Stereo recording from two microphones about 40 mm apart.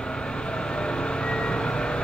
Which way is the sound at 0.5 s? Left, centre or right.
Left.